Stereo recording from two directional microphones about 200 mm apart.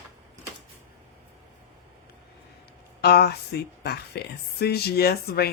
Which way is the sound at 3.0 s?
55° left (ahead or behind).